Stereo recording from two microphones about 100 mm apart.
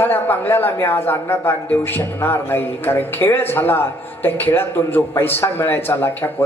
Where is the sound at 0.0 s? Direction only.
20° left (ahead or behind).